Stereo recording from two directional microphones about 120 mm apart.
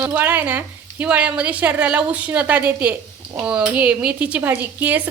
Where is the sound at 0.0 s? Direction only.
15° right (ahead or behind).